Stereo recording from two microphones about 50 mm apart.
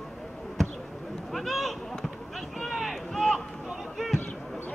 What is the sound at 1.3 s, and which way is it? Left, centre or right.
Speech, centre.